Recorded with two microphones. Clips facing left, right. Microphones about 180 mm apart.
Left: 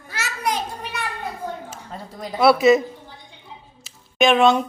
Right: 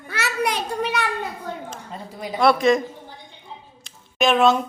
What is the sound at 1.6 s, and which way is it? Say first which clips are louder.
A woman's voice: right 1 dB; centre (ahead or behind).